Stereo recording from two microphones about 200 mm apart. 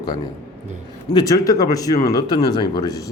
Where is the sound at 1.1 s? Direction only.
20° left (ahead or behind).